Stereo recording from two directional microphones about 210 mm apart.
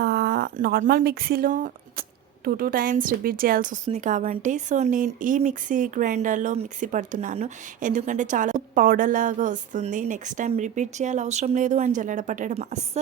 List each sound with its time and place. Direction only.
0.0 s speech: 50° right (ahead or behind); by 13.0 s 30° right (ahead or behind)